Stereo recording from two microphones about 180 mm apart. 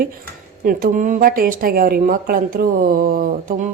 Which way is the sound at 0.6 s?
50° right (ahead or behind).